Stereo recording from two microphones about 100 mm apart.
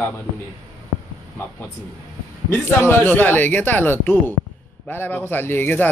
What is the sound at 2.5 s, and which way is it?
A man's voice, 20° left (ahead or behind).